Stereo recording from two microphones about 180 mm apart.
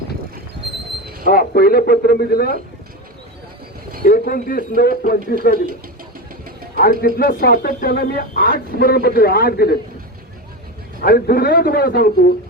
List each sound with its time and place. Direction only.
1.3 s speech: 55° left (ahead or behind)
4.0 s speech: 50° left (ahead or behind)
6.7 s speech: 55° left (ahead or behind)
11.0 s speech: 60° left (ahead or behind)